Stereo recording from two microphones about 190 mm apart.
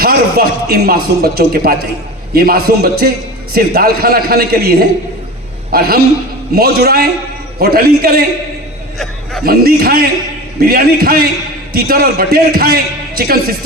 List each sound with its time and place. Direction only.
0.0 s a man's voice: 55° right (ahead or behind)
5.7 s a man's voice: 55° right (ahead or behind)
9.4 s a man's voice: 55° right (ahead or behind)